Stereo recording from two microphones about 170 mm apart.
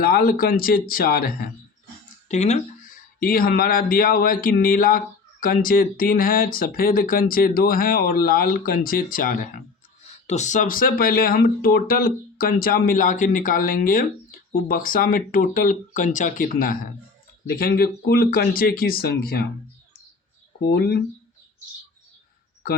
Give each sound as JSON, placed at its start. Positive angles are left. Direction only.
{"t": 0.0, "sound": "speech", "side_deg": 60}
{"t": 2.3, "sound": "speech", "side_deg": 40}
{"t": 3.2, "sound": "speech", "side_deg": 60}
{"t": 10.2, "sound": "speech", "side_deg": 45}
{"t": 20.6, "sound": "speech", "side_deg": 70}